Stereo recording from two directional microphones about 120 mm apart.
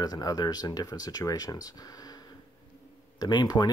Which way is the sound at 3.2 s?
35° left (ahead or behind).